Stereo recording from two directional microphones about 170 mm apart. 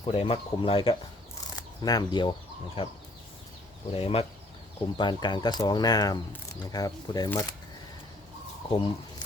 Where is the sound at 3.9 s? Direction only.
35° left (ahead or behind).